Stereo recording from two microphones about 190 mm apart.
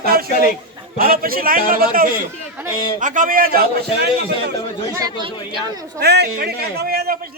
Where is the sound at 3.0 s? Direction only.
45° right (ahead or behind).